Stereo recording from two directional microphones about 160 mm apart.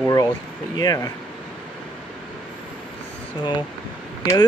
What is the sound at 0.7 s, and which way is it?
Speech, 25° left (ahead or behind).